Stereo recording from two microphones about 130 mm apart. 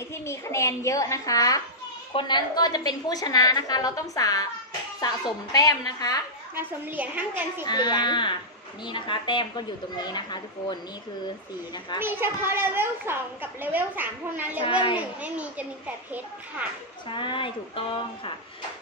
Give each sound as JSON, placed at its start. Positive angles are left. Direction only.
{"t": 0.1, "sound": "a woman's voice", "side_deg": 20}
{"t": 6.5, "sound": "a woman's voice", "side_deg": -15}
{"t": 7.6, "sound": "speech", "side_deg": 35}
{"t": 12.0, "sound": "a woman's voice", "side_deg": -15}
{"t": 17.1, "sound": "speech", "side_deg": 40}